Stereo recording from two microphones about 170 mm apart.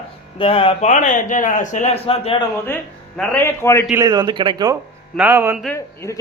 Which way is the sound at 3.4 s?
15° left (ahead or behind).